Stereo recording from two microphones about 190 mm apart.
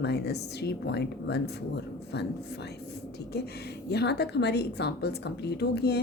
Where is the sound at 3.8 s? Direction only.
60° left (ahead or behind).